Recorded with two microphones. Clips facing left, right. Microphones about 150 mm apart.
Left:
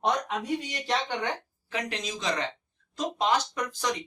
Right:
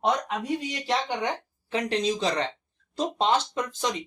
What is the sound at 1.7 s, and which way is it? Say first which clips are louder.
Speech: right 8 dB; 30° right (ahead or behind).